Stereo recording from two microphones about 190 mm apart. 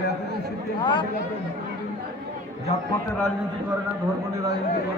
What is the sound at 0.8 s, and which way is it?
Speech, 25° left (ahead or behind).